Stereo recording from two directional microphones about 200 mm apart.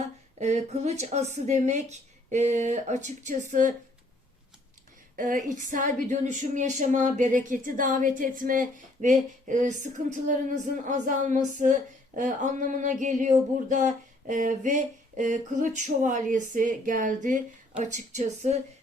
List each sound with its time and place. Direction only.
0.3 s speech: 35° right (ahead or behind)
5.1 s speech: 40° right (ahead or behind)